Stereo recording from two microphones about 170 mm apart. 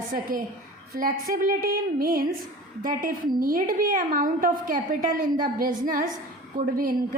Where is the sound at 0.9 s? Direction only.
60° right (ahead or behind).